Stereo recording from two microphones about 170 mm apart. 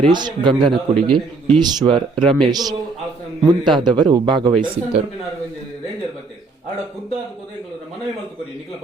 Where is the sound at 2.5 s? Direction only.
25° right (ahead or behind).